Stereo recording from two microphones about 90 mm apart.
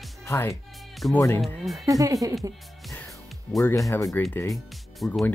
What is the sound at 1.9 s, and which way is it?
Speech, 40° right (ahead or behind).